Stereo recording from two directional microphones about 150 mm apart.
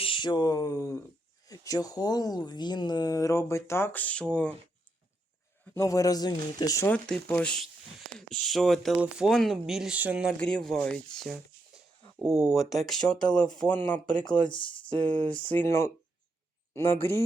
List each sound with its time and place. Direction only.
0.0 s speech: 35° left (ahead or behind); by 4.3 s 10° left (ahead or behind)
5.7 s speech: 20° left (ahead or behind)
6.8 s speech: 10° left (ahead or behind); by 10.3 s 5° right (ahead or behind)
10.4 s speech: 5° left (ahead or behind)
14.4 s speech: 35° left (ahead or behind)
14.8 s speech: 10° left (ahead or behind)
16.9 s speech: 15° left (ahead or behind)